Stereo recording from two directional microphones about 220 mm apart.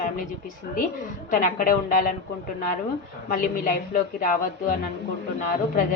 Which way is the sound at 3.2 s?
40° left (ahead or behind).